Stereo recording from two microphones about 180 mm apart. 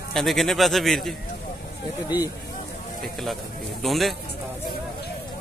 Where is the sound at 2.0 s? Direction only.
20° left (ahead or behind).